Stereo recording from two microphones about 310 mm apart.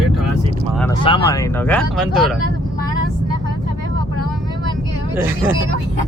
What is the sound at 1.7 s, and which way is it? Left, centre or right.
Speech, centre.